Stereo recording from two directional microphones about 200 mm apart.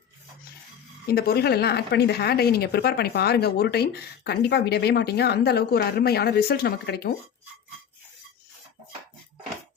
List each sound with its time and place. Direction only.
1.0 s a woman's voice: 50° left (ahead or behind)